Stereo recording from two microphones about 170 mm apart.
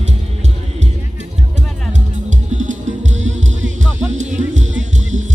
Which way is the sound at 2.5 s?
45° right (ahead or behind).